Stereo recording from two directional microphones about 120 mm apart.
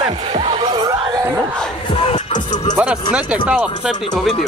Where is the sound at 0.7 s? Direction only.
35° right (ahead or behind).